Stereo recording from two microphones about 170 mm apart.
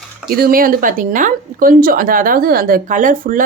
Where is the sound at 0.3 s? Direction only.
60° right (ahead or behind).